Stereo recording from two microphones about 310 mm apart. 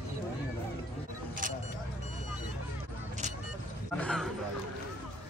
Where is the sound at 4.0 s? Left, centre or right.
Centre.